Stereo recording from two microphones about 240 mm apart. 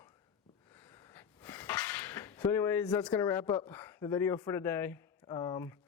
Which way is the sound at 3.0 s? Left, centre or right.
Centre.